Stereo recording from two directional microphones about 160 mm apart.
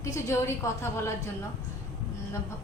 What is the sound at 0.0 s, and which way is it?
A woman's voice, 20° left (ahead or behind).